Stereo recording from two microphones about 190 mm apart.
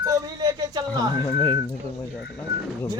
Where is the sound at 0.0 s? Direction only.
20° right (ahead or behind).